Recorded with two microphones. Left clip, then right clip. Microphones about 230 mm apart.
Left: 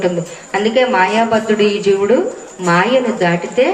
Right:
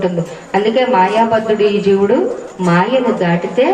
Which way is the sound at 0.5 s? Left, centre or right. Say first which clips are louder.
Right 1 dB; left.